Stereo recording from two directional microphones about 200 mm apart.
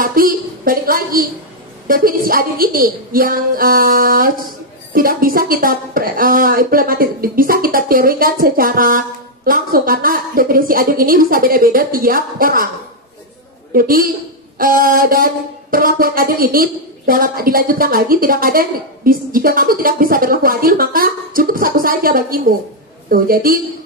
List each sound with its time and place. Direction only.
0.0 s a woman's voice: 45° right (ahead or behind)
13.7 s speech: 45° right (ahead or behind)